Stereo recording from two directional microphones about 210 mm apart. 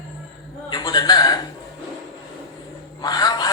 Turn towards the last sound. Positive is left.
turn(degrees=20)  # may be behind; listen again after turning